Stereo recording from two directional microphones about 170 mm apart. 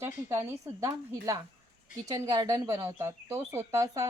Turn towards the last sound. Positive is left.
turn(degrees=-20)  # may be behind; listen again after turning